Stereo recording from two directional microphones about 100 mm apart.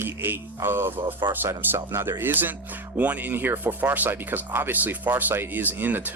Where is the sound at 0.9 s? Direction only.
65° right (ahead or behind).